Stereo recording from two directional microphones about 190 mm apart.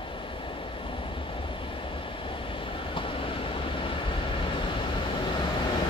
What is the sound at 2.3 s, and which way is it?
Vehicle, 25° left (ahead or behind).